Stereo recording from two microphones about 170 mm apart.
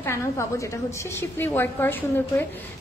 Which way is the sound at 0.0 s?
15° left (ahead or behind).